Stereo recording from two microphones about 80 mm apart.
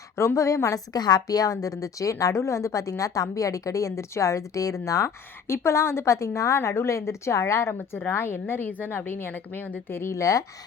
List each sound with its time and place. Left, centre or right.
0.2 s a woman's voice: left
0.9 s a woman's voice: left